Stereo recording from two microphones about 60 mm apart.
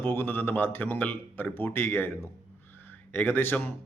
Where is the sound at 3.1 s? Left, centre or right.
Left.